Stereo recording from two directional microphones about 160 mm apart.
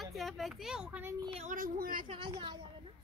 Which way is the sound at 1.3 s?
50° right (ahead or behind).